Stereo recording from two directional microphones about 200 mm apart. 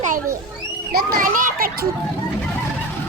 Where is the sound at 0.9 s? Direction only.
50° right (ahead or behind).